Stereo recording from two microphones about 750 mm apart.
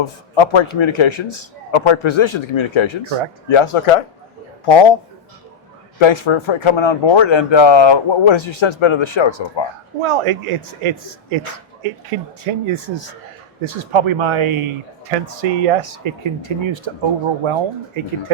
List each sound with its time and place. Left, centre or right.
0.0 s a man's voice: left
6.0 s a man's voice: left
10.0 s speech: right